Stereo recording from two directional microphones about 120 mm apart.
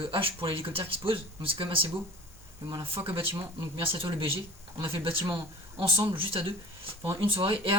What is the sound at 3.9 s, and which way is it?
Speech, 50° right (ahead or behind).